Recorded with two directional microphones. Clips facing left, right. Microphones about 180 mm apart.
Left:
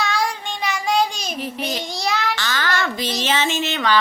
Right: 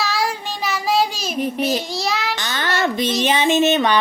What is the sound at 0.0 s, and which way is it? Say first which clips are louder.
Child singing: right 1 dB; 5° right (ahead or behind).